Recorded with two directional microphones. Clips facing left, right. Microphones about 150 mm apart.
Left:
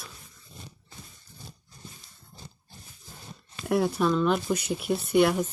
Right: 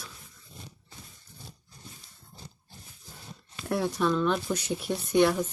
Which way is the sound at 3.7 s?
5° left (ahead or behind).